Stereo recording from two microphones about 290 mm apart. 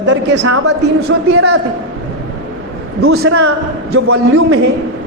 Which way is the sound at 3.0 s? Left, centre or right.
Right.